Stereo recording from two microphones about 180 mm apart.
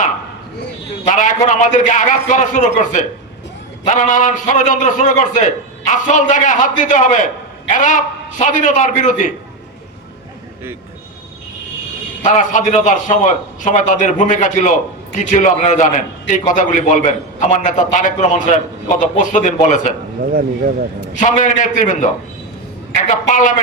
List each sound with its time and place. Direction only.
1.1 s a man's voice: 45° left (ahead or behind)
12.2 s a man's voice: 45° left (ahead or behind)
20.2 s speech: 55° right (ahead or behind)
21.2 s a man's voice: 45° left (ahead or behind)
23.3 s a man's voice: 45° left (ahead or behind)